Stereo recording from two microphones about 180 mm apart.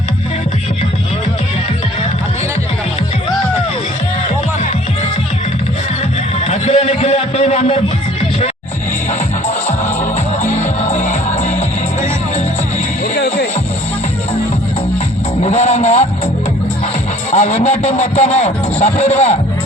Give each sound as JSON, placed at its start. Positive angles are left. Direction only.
{"t": 6.4, "sound": "music", "side_deg": 35}
{"t": 9.6, "sound": "music", "side_deg": 40}
{"t": 13.1, "sound": "music", "side_deg": 65}
{"t": 15.4, "sound": "music", "side_deg": 40}
{"t": 17.3, "sound": "a sound", "side_deg": 40}